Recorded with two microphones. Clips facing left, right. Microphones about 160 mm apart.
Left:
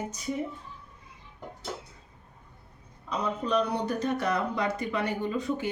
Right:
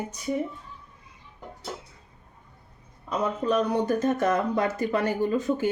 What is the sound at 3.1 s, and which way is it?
Speech, 45° right (ahead or behind).